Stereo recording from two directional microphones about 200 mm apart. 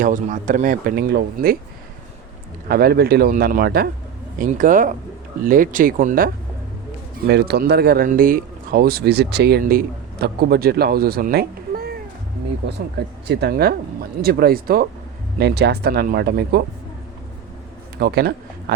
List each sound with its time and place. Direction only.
0.0 s speech: 40° right (ahead or behind)
2.6 s speech: 50° right (ahead or behind)
7.3 s speech: 55° right (ahead or behind)
17.9 s speech: 55° right (ahead or behind)